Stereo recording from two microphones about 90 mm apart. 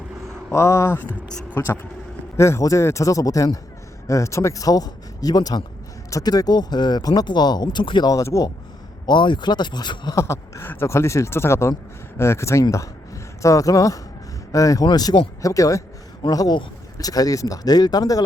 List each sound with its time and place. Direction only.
0.5 s speech: 35° left (ahead or behind); by 8.1 s 55° left (ahead or behind)
8.1 s speech: 35° left (ahead or behind)
9.0 s speech: 60° left (ahead or behind)
10.2 s speech: 35° left (ahead or behind)
14.8 s speech: 50° left (ahead or behind)
15.4 s speech: 40° left (ahead or behind)